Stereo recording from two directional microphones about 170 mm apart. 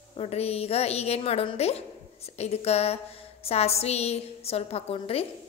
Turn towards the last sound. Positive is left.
turn(degrees=35)  # may be behind; listen again after turning